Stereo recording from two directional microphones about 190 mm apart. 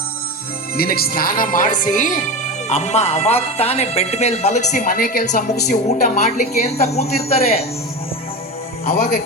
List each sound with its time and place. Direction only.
0.8 s speech: 50° left (ahead or behind); by 7.6 s 35° left (ahead or behind)
8.8 s speech: 55° left (ahead or behind)